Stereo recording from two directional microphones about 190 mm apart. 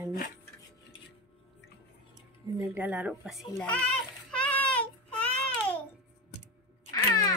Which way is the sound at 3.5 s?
5° left (ahead or behind).